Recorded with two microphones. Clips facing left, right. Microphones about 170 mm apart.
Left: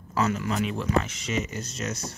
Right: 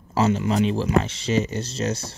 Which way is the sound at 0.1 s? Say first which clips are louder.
Right 5 dB; 25° right (ahead or behind).